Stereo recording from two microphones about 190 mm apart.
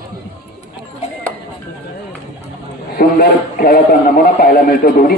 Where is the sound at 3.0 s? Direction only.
50° left (ahead or behind).